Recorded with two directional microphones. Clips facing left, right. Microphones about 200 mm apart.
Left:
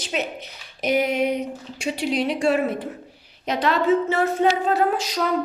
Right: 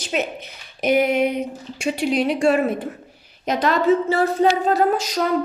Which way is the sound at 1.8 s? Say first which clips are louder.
Right 3 dB; 55° right (ahead or behind).